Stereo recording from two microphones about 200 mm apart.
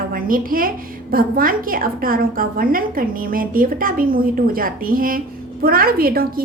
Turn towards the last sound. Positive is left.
turn(degrees=-45)  # may be behind; listen again after turning